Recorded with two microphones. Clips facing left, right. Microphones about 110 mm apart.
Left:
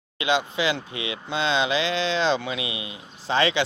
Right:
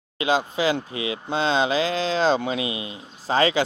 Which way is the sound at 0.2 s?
40° right (ahead or behind).